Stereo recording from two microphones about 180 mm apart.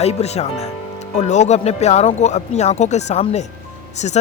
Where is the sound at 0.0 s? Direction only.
35° left (ahead or behind).